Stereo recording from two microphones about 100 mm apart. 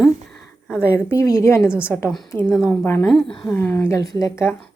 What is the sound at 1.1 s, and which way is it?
A woman's voice, 30° left (ahead or behind).